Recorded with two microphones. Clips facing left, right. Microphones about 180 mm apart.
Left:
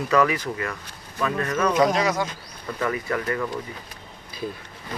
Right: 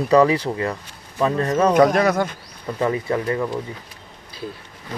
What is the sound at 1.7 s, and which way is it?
Speech, 55° right (ahead or behind).